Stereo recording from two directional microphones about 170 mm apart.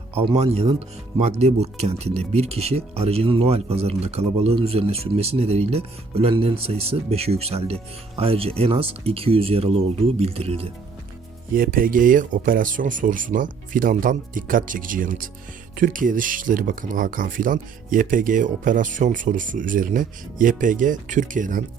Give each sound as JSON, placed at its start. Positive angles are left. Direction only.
{"t": 0.2, "sound": "speech", "side_deg": -35}
{"t": 11.5, "sound": "speech", "side_deg": -55}